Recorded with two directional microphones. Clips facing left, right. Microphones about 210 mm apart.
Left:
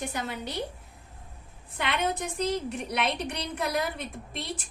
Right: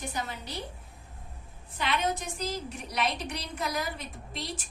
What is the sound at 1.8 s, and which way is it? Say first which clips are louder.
A woman's voice: left 1 dB; 60° left (ahead or behind).